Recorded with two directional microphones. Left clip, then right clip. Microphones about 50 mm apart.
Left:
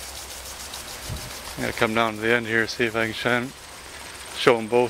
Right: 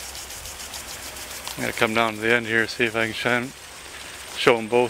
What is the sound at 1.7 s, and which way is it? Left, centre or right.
Speech, centre.